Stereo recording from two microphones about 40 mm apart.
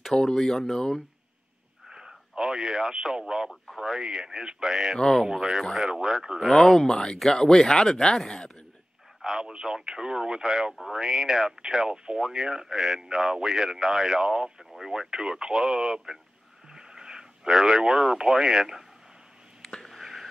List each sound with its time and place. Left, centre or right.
0.1 s speech: centre
1.9 s radio: centre
3.8 s speech: centre
4.9 s speech: centre
5.2 s speech: centre
6.4 s speech: centre
9.2 s speech: centre
19.9 s whispering: centre